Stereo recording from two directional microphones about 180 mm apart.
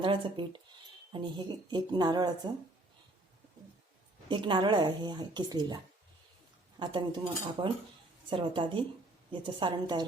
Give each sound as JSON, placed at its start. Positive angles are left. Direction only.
{"t": 0.0, "sound": "speech", "side_deg": -25}
{"t": 4.3, "sound": "speech", "side_deg": -25}